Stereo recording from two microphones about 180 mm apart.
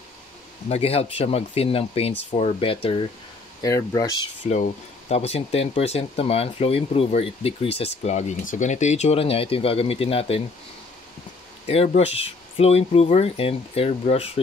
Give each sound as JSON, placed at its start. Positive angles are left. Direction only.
{"t": 0.7, "sound": "speech", "side_deg": 35}
{"t": 3.6, "sound": "speech", "side_deg": 20}
{"t": 4.5, "sound": "speech", "side_deg": 40}
{"t": 11.6, "sound": "speech", "side_deg": 35}